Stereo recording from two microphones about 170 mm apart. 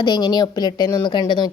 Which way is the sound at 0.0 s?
25° left (ahead or behind).